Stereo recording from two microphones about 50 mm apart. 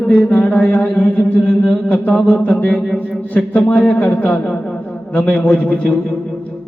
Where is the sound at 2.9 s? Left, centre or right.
Left.